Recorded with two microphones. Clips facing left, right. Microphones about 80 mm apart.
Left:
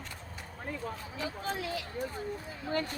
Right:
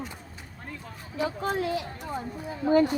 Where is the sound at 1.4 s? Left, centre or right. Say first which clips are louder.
Right 7 dB; right.